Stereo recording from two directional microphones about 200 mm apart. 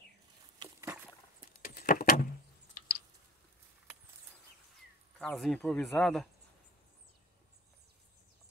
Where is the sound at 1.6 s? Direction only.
45° left (ahead or behind).